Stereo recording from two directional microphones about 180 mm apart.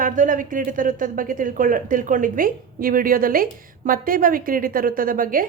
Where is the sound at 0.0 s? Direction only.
45° right (ahead or behind).